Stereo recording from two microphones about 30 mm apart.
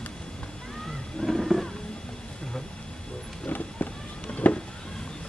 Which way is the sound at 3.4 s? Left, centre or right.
Left.